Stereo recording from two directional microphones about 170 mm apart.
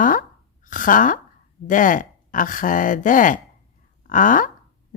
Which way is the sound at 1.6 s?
50° left (ahead or behind).